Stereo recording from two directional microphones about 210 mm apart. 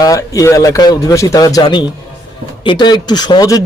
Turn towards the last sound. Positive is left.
turn(degrees=20)  # may be behind; listen again after turning